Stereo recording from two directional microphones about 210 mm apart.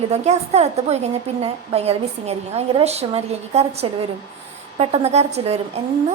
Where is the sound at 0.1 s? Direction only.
30° right (ahead or behind).